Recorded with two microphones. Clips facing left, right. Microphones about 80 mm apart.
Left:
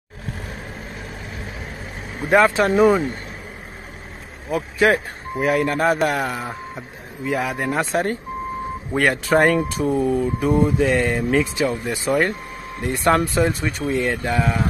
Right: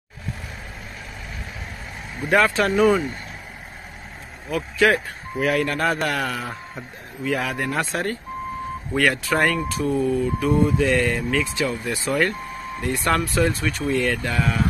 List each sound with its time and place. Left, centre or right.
2.1 s speech: left
4.5 s speech: left